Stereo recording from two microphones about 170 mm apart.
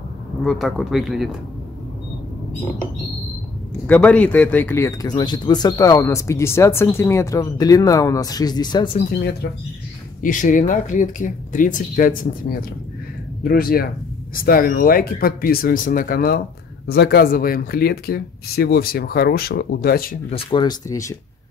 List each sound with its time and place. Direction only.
0.4 s speech: centre (ahead or behind)
3.8 s speech: 10° left (ahead or behind); by 8.9 s 25° left (ahead or behind)
10.2 s speech: 50° left (ahead or behind)
20.2 s speech: 35° left (ahead or behind)